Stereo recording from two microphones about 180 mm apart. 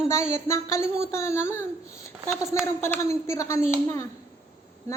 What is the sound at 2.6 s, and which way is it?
A woman's voice, 15° left (ahead or behind).